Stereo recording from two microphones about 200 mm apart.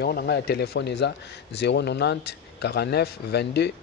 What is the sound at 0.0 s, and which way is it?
Speech, 50° left (ahead or behind).